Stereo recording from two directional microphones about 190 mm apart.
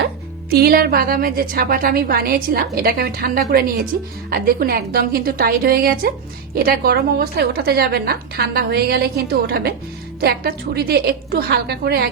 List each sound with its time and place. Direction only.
0.5 s a woman's voice: 50° right (ahead or behind)